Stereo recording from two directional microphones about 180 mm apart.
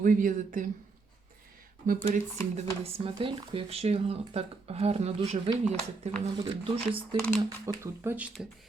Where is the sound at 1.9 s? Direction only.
45° right (ahead or behind).